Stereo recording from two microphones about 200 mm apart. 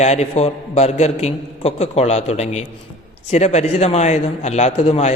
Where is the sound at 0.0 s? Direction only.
35° left (ahead or behind).